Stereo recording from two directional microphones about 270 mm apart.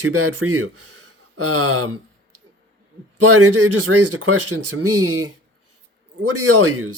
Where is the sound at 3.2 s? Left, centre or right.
Right.